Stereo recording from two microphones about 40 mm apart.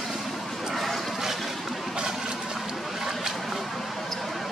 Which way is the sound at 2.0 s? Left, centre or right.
Centre.